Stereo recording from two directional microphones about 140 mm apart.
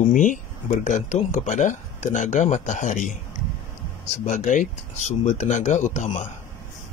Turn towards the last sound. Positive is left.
turn(degrees=60)  # may be behind; listen again after turning